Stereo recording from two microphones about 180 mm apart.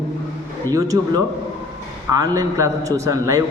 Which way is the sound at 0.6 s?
20° right (ahead or behind).